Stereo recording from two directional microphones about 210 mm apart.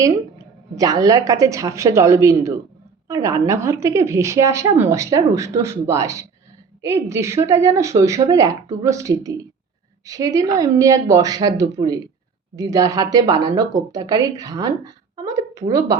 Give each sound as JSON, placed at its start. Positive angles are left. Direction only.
{"t": 0.8, "sound": "speech", "side_deg": -15}